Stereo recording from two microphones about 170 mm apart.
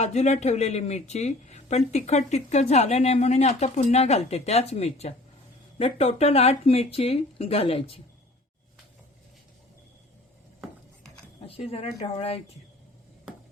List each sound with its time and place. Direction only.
0.0 s speech: 40° left (ahead or behind)
11.3 s speech: 35° left (ahead or behind)